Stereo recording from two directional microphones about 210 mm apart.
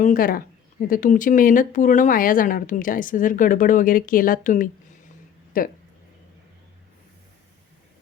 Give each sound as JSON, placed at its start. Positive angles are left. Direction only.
{"t": 0.0, "sound": "speech", "side_deg": 40}